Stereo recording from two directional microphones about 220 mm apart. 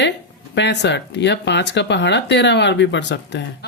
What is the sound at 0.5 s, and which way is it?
Speech, 50° left (ahead or behind).